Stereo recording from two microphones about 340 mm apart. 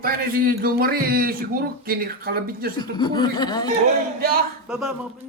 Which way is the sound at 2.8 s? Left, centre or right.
Centre.